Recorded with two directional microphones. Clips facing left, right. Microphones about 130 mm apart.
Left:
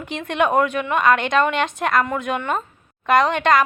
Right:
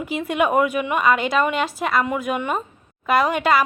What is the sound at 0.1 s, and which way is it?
Speech, 5° right (ahead or behind).